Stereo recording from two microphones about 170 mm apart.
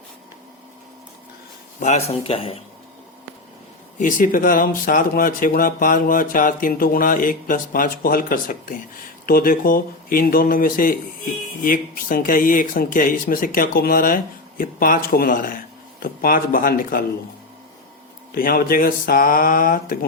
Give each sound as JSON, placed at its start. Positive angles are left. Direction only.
{"t": 1.8, "sound": "speech", "side_deg": 40}
{"t": 3.9, "sound": "speech", "side_deg": 50}
{"t": 18.3, "sound": "speech", "side_deg": 60}